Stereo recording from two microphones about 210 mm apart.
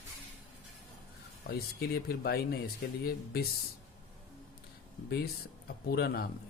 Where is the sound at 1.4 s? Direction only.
50° left (ahead or behind).